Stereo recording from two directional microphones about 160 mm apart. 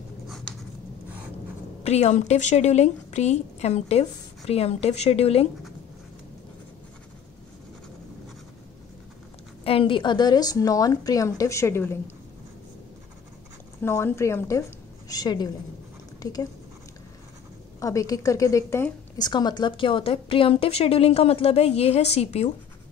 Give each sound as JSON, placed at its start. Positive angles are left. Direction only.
{"t": 1.8, "sound": "a woman's voice", "side_deg": 40}
{"t": 9.7, "sound": "a woman's voice", "side_deg": 35}
{"t": 13.8, "sound": "a woman's voice", "side_deg": 15}
{"t": 17.7, "sound": "a woman's voice", "side_deg": 20}
{"t": 19.2, "sound": "a woman's voice", "side_deg": 25}